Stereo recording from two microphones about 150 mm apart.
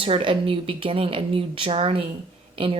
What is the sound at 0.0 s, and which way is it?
Speech, 35° right (ahead or behind).